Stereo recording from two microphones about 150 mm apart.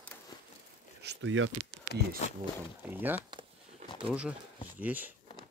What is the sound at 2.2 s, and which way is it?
Speech, 45° left (ahead or behind).